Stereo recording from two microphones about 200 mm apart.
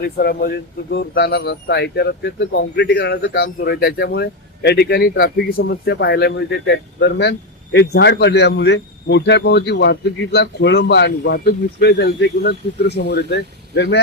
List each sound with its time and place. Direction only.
0.2 s speech: 50° left (ahead or behind)